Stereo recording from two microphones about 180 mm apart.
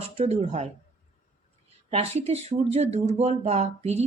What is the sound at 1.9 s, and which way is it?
Speech, 35° right (ahead or behind).